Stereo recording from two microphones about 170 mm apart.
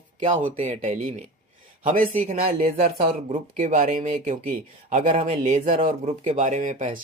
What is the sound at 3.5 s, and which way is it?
Speech, 45° right (ahead or behind).